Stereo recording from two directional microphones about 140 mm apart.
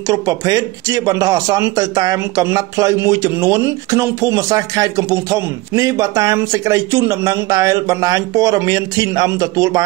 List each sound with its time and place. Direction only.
0.1 s speech: 25° right (ahead or behind)